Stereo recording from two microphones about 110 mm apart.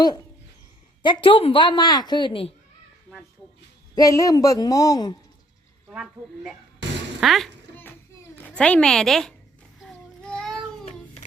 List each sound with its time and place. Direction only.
1.0 s a woman's voice: 55° left (ahead or behind)
3.9 s speech: 30° left (ahead or behind)
7.2 s a child's voice: centre (ahead or behind)
8.4 s a woman's voice: 10° left (ahead or behind)
9.8 s child singing: 5° left (ahead or behind)
10.8 s music: 85° left